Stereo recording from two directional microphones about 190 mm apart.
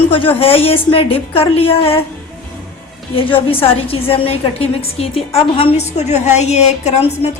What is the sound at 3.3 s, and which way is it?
A woman's voice, 30° left (ahead or behind).